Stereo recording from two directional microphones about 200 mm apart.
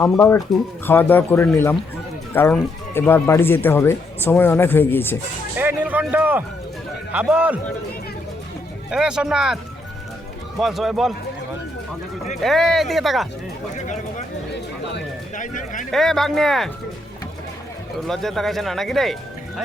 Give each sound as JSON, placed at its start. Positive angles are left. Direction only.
{"t": 0.0, "sound": "speech", "side_deg": 15}
{"t": 5.5, "sound": "speech", "side_deg": -10}
{"t": 8.9, "sound": "speech", "side_deg": -5}
{"t": 10.6, "sound": "speech", "side_deg": 0}
{"t": 12.4, "sound": "speech", "side_deg": 0}
{"t": 13.7, "sound": "speech", "side_deg": 35}
{"t": 15.4, "sound": "speech", "side_deg": 40}
{"t": 15.9, "sound": "speech", "side_deg": 0}
{"t": 18.1, "sound": "speech", "side_deg": 0}